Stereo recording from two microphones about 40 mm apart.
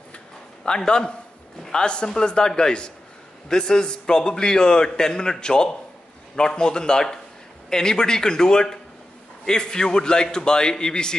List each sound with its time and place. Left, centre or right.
0.7 s a man's voice: left